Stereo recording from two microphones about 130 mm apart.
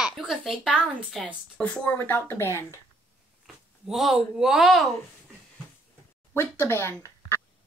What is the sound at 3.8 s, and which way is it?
A woman's voice, 5° right (ahead or behind).